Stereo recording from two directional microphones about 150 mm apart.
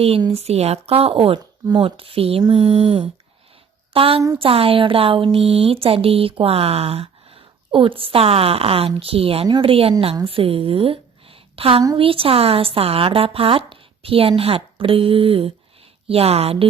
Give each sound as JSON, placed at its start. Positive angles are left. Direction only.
{"t": 0.3, "sound": "speech", "side_deg": -45}
{"t": 2.6, "sound": "a sound", "side_deg": -45}
{"t": 3.9, "sound": "a woman's voice", "side_deg": -40}